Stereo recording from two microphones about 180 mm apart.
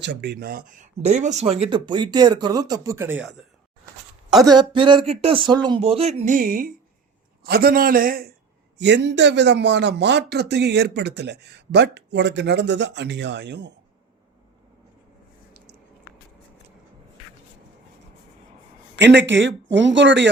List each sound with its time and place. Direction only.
0.0 s speech: 70° right (ahead or behind); by 4.5 s centre (ahead or behind)
4.5 s a man's voice: 25° right (ahead or behind); by 8.3 s 50° right (ahead or behind)
8.8 s speech: 70° right (ahead or behind)
18.9 s speech: 75° right (ahead or behind)